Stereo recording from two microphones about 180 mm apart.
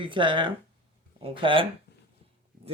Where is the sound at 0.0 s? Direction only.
25° right (ahead or behind).